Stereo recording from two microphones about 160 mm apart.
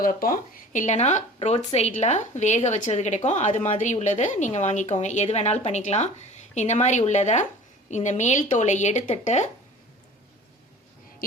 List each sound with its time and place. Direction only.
0.0 s a woman's voice: 65° left (ahead or behind); by 9.5 s 45° left (ahead or behind)